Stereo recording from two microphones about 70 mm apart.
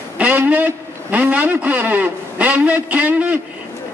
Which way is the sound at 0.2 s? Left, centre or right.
Right.